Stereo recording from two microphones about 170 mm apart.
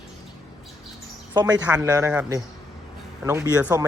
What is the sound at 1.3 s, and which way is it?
Speech, 25° right (ahead or behind).